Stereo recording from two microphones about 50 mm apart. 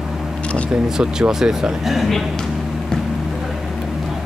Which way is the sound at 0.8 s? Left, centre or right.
Centre.